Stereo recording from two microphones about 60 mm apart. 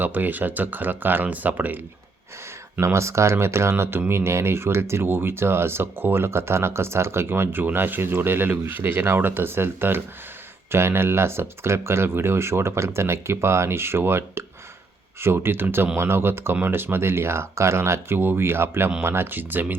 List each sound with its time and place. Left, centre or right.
0.0 s speech: right
2.8 s speech: right
18.2 s speech: right